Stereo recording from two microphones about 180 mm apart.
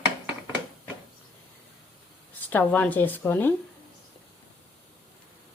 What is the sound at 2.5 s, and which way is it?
A woman's voice, 10° left (ahead or behind).